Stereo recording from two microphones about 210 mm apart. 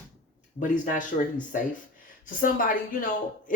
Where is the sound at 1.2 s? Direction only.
35° left (ahead or behind).